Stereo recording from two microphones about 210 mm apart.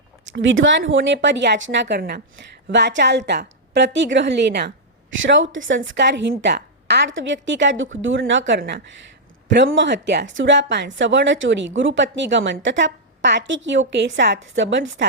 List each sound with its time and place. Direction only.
0.3 s a woman's voice: 60° right (ahead or behind)
5.2 s a woman's voice: 65° right (ahead or behind)